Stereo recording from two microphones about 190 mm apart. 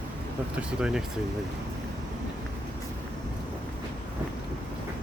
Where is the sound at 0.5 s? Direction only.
5° right (ahead or behind).